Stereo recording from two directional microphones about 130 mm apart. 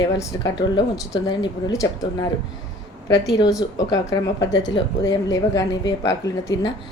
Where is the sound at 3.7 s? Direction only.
30° left (ahead or behind).